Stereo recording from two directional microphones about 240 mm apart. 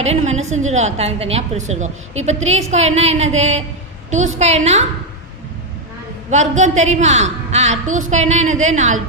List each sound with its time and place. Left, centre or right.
0.0 s a woman's voice: right
6.3 s a woman's voice: right